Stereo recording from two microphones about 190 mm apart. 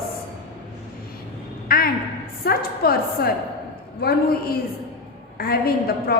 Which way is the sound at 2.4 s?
55° left (ahead or behind).